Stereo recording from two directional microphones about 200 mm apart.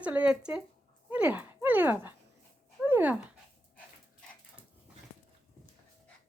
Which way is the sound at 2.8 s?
10° right (ahead or behind).